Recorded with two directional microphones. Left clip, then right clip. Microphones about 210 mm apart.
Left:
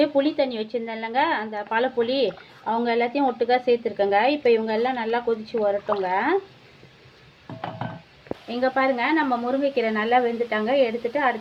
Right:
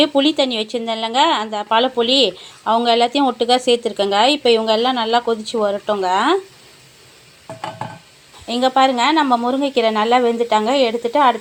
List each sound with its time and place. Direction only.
0.2 s speech: 30° right (ahead or behind)
8.4 s speech: 30° right (ahead or behind)